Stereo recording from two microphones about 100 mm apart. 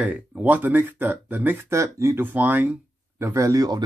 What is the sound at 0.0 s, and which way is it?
Speech, 15° right (ahead or behind).